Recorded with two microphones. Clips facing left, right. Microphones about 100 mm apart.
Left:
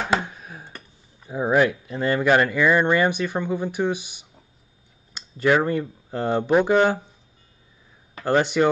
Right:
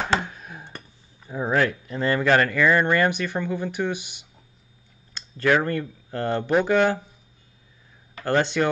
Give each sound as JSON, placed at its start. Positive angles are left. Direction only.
{"t": 0.1, "sound": "a sound", "side_deg": 5}
{"t": 1.2, "sound": "speech", "side_deg": 15}
{"t": 8.2, "sound": "speech", "side_deg": 10}